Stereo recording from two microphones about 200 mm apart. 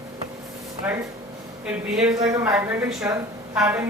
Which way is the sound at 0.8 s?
5° right (ahead or behind).